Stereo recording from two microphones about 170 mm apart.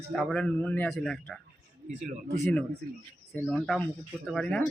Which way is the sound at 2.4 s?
10° left (ahead or behind).